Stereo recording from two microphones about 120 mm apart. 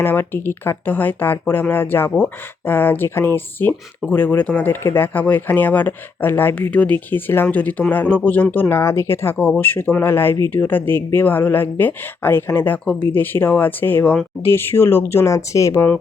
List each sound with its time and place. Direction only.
0.0 s speech: 20° left (ahead or behind)
14.4 s speech: 20° left (ahead or behind)